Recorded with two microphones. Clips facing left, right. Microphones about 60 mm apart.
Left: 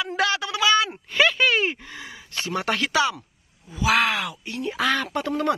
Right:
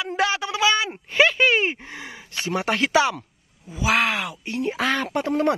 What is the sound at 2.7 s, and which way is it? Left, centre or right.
Speech, right.